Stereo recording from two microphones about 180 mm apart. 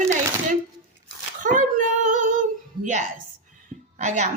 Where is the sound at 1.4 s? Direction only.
50° right (ahead or behind).